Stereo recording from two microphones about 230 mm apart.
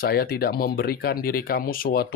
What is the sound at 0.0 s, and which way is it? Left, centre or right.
Speech, left.